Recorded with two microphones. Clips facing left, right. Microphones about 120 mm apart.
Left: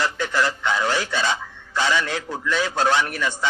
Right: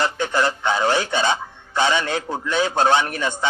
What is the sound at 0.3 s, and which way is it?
Radio, 25° right (ahead or behind).